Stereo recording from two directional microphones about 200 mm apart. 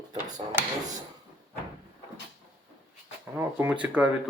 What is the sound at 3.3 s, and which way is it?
Speech, 10° right (ahead or behind).